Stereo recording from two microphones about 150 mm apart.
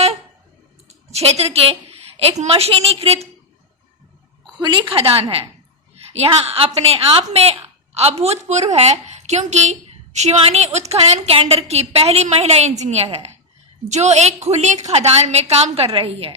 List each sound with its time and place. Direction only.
1.1 s a woman's voice: 45° right (ahead or behind)
4.5 s a woman's voice: 30° right (ahead or behind)